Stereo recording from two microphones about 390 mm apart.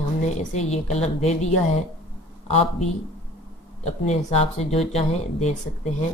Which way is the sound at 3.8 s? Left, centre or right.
Centre.